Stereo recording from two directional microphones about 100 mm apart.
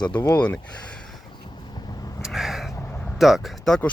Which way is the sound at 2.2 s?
5° right (ahead or behind).